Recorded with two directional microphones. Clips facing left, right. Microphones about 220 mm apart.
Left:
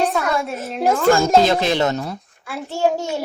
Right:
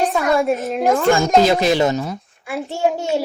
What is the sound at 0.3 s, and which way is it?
Speech, centre (ahead or behind).